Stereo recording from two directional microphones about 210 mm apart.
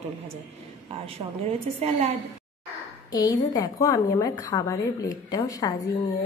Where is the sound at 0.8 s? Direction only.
30° right (ahead or behind).